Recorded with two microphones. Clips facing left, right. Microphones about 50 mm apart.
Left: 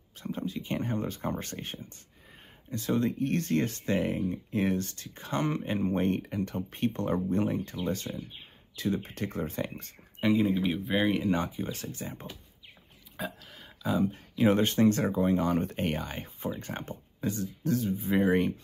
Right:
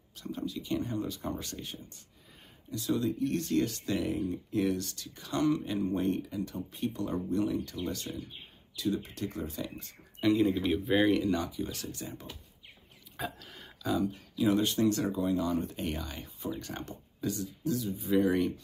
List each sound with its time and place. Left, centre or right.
0.2 s speech: left
10.2 s speech: centre
11.1 s speech: left
13.2 s a sound: centre
14.0 s speech: left